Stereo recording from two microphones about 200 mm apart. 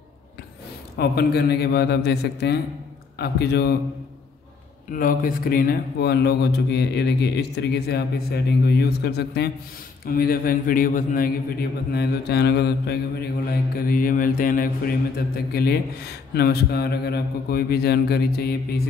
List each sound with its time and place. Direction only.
0.9 s a man's voice: 55° left (ahead or behind)
4.9 s a man's voice: 45° left (ahead or behind)